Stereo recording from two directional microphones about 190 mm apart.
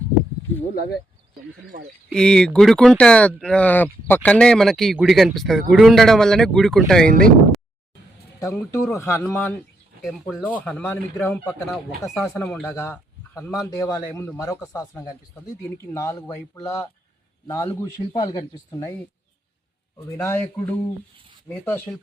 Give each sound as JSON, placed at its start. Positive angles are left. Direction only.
{"t": 1.7, "sound": "speech", "side_deg": -45}
{"t": 2.1, "sound": "speech", "side_deg": 5}
{"t": 8.4, "sound": "a man's voice", "side_deg": 15}
{"t": 10.0, "sound": "a man's voice", "side_deg": 0}
{"t": 12.1, "sound": "a man's voice", "side_deg": 0}
{"t": 20.0, "sound": "a man's voice", "side_deg": 10}